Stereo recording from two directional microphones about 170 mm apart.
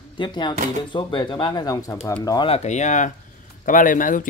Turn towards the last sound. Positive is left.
turn(degrees=55)  # may be behind; listen again after turning